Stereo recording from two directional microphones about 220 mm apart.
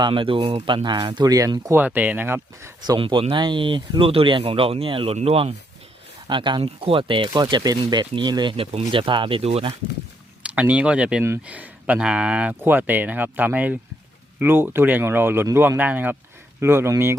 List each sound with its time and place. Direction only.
0.0 s speech: 25° right (ahead or behind)
10.4 s speech: 5° right (ahead or behind)